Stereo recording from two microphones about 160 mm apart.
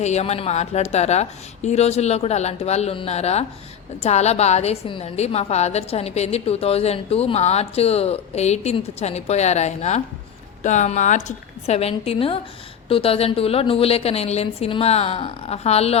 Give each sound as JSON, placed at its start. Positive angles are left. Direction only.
{"t": 0.0, "sound": "a woman's voice", "side_deg": 45}